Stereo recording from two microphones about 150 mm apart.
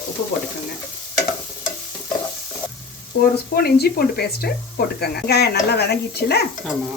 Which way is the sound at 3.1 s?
90° left.